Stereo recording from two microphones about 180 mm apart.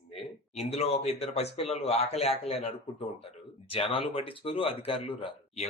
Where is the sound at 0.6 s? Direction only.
35° left (ahead or behind).